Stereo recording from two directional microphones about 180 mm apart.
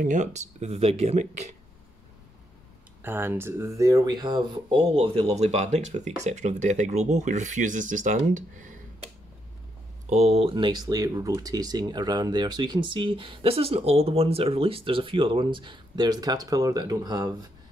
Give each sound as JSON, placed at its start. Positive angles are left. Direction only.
{"t": 0.0, "sound": "speech", "side_deg": -45}
{"t": 3.0, "sound": "speech", "side_deg": -10}
{"t": 10.0, "sound": "speech", "side_deg": -35}